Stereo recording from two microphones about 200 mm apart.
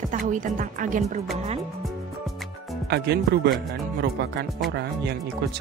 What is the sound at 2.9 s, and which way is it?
Speech, 55° right (ahead or behind).